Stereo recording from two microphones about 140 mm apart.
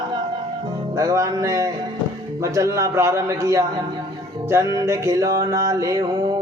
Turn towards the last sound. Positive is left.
turn(degrees=-25)  # may be behind; listen again after turning